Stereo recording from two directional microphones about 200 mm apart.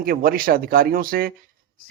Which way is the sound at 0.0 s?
45° right (ahead or behind).